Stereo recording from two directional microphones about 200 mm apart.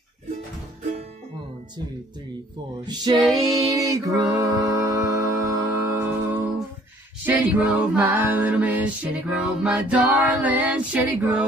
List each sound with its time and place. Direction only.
2.9 s music: 20° right (ahead or behind)
7.2 s a capella: 5° right (ahead or behind)